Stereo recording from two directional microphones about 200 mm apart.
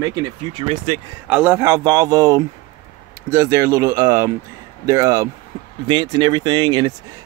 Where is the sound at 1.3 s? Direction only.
5° right (ahead or behind).